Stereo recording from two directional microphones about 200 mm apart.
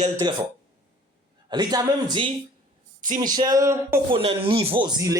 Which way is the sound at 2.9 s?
40° right (ahead or behind).